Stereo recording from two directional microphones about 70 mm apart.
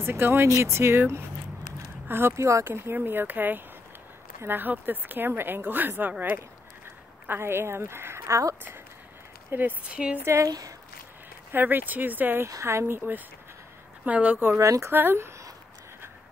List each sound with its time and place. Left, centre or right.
0.0 s speech: right
7.2 s speech: right
9.5 s speech: right
9.8 s a woman's voice: centre
10.2 s speech: right
11.5 s speech: right
12.4 s speech: right
14.5 s speech: right
15.0 s speech: right